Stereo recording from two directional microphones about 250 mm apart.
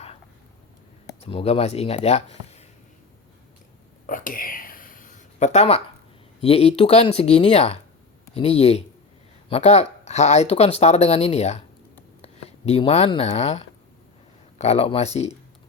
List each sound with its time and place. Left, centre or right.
1.2 s speech: left
4.0 s whispering: left
6.4 s speech: left